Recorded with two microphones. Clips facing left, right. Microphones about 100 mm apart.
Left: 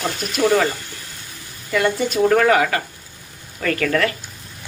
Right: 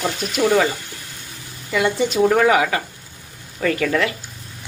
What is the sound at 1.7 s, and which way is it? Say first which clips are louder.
A woman's voice: even; 10° right (ahead or behind).